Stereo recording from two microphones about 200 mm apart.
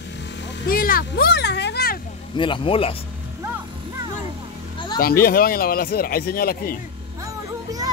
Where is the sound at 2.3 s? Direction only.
25° left (ahead or behind).